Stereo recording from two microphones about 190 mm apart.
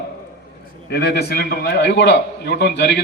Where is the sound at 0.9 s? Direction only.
60° left (ahead or behind).